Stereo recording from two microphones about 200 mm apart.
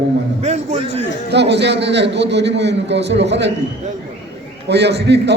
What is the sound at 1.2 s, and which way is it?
A man's voice, 60° right (ahead or behind).